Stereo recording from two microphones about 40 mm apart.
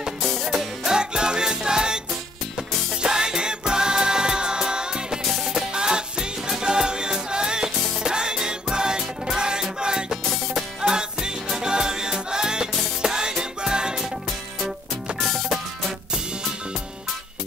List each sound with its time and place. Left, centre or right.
0.2 s music: centre
0.8 s music: centre
5.2 s music: centre
5.7 s music: centre
15.1 s music: centre